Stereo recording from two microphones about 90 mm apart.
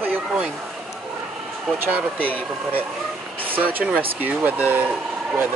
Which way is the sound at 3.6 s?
15° right (ahead or behind).